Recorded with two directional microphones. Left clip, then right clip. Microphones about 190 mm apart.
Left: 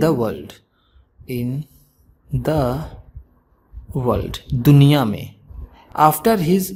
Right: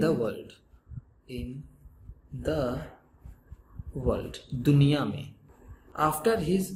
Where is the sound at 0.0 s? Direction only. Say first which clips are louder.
Left 9 dB; 50° left (ahead or behind).